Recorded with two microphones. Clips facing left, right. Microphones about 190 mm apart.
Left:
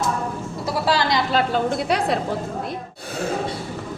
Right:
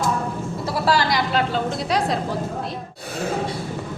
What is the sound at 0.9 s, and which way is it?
Speech, 20° left (ahead or behind).